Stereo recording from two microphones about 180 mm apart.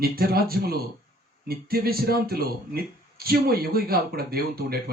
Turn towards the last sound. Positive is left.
turn(degrees=-55)  # may be behind; listen again after turning